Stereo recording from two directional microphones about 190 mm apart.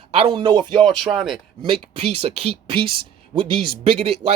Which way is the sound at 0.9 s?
Centre (ahead or behind).